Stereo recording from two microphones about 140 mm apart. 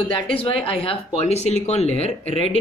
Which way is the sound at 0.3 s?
40° left (ahead or behind).